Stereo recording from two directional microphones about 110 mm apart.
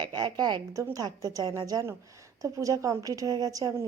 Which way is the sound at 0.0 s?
40° right (ahead or behind).